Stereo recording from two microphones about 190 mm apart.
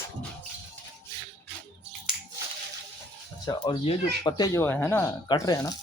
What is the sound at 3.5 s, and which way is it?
Speech, 25° left (ahead or behind).